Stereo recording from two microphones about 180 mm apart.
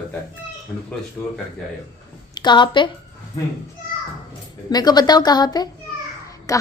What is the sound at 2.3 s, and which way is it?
Speech, 25° left (ahead or behind).